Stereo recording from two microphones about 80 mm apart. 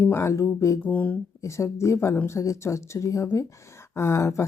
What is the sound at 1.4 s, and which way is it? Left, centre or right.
Speech, left.